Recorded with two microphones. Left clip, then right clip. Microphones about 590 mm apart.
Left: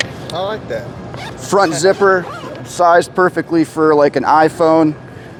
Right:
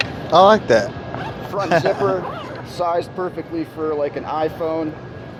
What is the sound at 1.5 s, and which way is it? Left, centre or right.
Speech, left.